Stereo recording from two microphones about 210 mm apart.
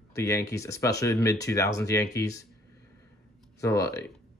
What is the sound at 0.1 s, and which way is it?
Speech, 15° left (ahead or behind).